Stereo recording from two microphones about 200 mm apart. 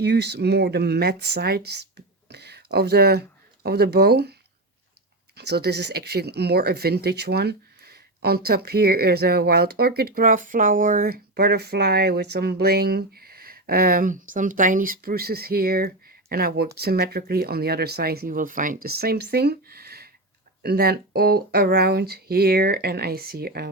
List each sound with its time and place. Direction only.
0.0 s speech: 55° right (ahead or behind)
5.4 s speech: 55° right (ahead or behind)